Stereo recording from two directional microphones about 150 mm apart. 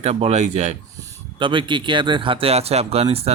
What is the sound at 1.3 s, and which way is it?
Speech, 35° right (ahead or behind).